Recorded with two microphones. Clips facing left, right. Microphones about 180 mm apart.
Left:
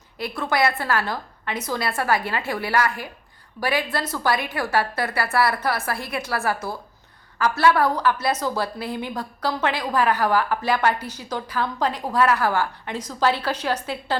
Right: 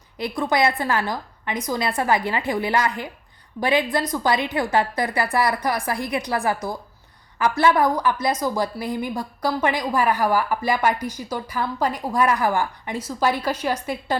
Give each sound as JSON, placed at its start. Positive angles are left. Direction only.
{"t": 0.2, "sound": "a woman's voice", "side_deg": -15}